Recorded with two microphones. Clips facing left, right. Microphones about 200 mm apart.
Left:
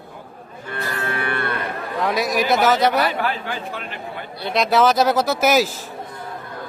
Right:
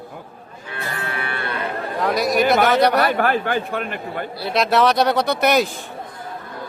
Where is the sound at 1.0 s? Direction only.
50° left (ahead or behind).